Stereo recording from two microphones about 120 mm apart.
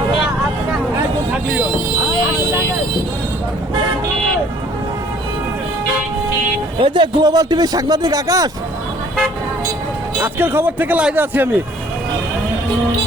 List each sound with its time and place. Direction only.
6.7 s speech: 45° right (ahead or behind)
10.2 s speech: 15° right (ahead or behind)